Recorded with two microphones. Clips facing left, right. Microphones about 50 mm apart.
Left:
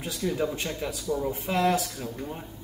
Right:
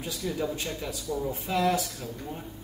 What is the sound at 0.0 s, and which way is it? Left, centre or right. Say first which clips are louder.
Speech: left 3 dB; left.